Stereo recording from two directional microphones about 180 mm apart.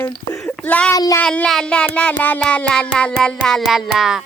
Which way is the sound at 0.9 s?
20° left (ahead or behind).